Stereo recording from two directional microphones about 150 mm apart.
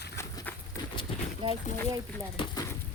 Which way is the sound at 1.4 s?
35° right (ahead or behind).